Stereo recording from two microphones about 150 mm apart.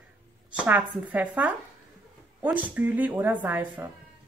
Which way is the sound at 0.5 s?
10° right (ahead or behind).